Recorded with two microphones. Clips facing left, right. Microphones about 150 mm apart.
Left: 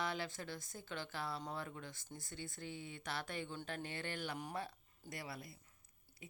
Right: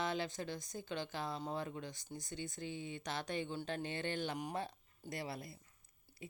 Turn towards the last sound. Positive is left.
turn(degrees=-25)  # may be behind; listen again after turning